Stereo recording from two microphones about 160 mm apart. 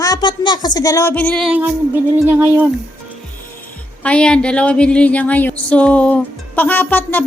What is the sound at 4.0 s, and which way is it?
A woman's voice, 5° left (ahead or behind).